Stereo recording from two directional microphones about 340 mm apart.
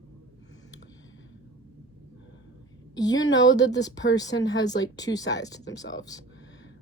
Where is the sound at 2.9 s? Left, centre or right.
Centre.